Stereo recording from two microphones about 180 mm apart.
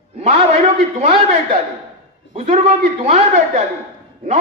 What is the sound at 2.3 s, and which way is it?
A man's voice, 35° right (ahead or behind).